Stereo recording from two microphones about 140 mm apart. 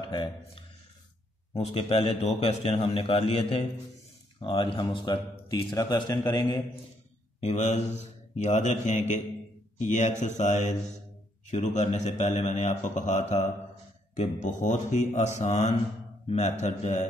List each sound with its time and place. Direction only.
0.1 s speech: 35° left (ahead or behind)
1.6 s a man's voice: 45° left (ahead or behind); by 6.6 s 30° left (ahead or behind)
7.3 s a man's voice: 55° left (ahead or behind)